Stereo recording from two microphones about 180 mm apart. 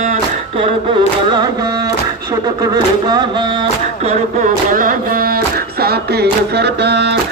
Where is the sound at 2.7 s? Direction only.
25° right (ahead or behind).